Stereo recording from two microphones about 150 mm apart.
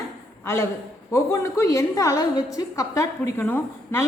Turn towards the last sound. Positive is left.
turn(degrees=15)  # may be behind; listen again after turning